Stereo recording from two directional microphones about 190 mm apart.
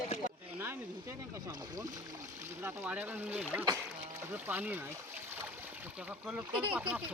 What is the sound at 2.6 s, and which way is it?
Speech, 10° right (ahead or behind).